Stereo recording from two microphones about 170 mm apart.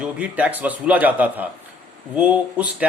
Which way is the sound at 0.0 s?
10° right (ahead or behind).